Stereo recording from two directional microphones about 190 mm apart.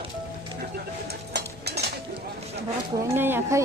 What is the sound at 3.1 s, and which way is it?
Speech, 10° right (ahead or behind).